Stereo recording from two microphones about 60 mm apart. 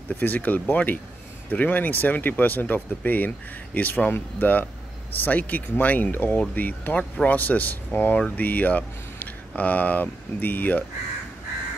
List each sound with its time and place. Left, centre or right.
0.1 s speech: left
7.0 s speech: centre
7.3 s speech: left